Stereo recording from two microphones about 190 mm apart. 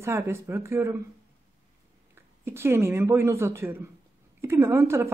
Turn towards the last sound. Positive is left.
turn(degrees=-15)  # may be behind; listen again after turning